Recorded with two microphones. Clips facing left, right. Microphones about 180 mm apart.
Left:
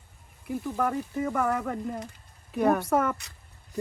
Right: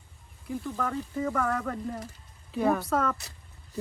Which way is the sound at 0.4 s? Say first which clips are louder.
Left 3 dB; 10° left (ahead or behind).